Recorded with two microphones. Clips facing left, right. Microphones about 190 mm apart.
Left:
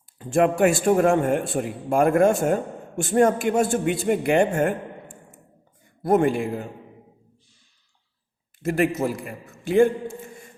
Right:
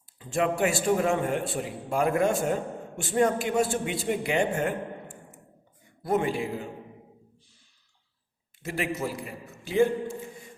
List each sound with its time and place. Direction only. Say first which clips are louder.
0.2 s a man's voice: left 7 dB; 50° left (ahead or behind)
8.6 s a man's voice: left 8 dB; 50° left (ahead or behind)